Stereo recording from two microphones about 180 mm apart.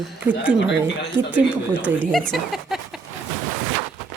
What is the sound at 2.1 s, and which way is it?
Speech, centre (ahead or behind).